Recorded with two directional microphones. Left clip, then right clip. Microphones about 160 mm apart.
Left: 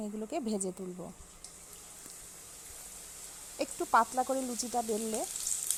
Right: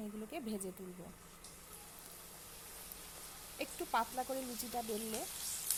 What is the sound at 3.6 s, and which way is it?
Speech, 30° left (ahead or behind).